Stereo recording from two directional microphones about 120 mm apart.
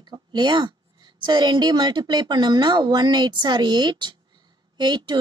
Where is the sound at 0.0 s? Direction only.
35° right (ahead or behind).